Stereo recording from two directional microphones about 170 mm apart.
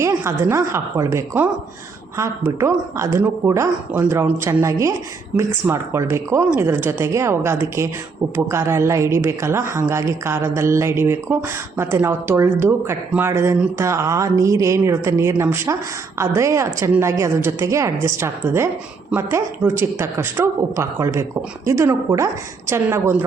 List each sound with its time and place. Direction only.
0.0 s speech: 15° right (ahead or behind)